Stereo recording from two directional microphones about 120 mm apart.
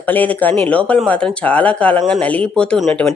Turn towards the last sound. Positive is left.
turn(degrees=5)  # may be behind; listen again after turning